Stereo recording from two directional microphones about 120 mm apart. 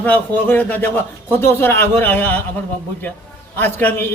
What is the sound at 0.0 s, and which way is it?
A man's voice, 15° left (ahead or behind).